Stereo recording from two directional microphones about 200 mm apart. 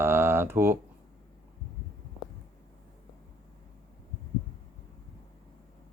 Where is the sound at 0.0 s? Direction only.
10° right (ahead or behind).